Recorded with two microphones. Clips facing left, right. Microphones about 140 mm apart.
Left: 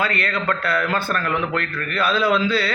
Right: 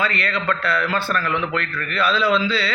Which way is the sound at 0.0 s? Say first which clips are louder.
Even; 45° left (ahead or behind).